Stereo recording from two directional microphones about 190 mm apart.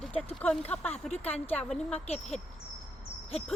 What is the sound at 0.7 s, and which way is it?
A woman's voice, 5° left (ahead or behind).